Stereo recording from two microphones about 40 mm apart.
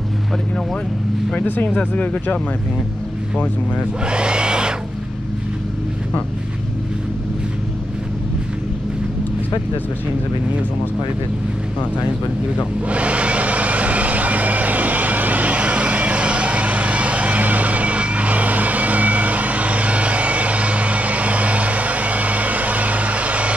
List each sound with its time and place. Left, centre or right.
4.0 s vacuum cleaner: right
12.8 s vehicle: right